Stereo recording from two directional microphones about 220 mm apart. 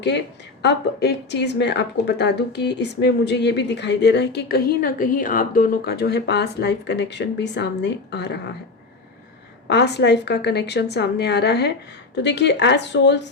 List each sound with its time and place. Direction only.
0.6 s speech: 50° left (ahead or behind)
9.6 s speech: 50° left (ahead or behind)